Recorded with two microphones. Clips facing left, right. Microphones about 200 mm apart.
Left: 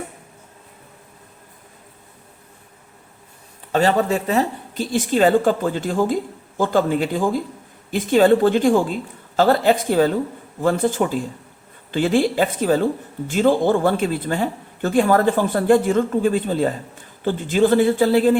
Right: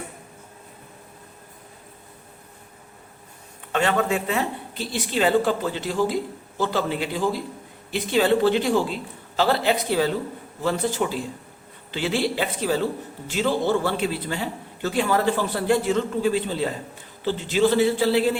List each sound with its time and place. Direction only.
3.7 s a man's voice: 35° left (ahead or behind)